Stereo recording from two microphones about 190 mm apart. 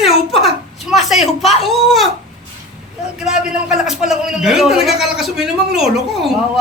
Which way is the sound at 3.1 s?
5° right (ahead or behind).